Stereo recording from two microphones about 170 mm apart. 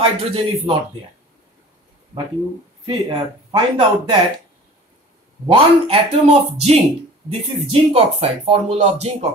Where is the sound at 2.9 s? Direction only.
30° right (ahead or behind).